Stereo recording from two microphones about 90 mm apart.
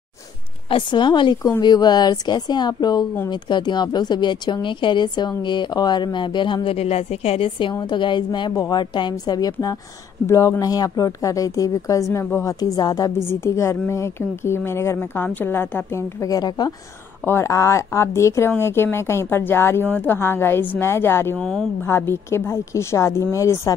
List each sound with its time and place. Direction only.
0.7 s a woman's voice: 70° left (ahead or behind)
7.9 s a woman's voice: 60° left (ahead or behind); by 13.1 s 45° left (ahead or behind)
13.3 s a woman's voice: 30° left (ahead or behind)
16.2 s a woman's voice: 45° left (ahead or behind)
17.2 s a woman's voice: 30° left (ahead or behind)
21.4 s speech: 5° left (ahead or behind)
21.8 s a woman's voice: 25° left (ahead or behind)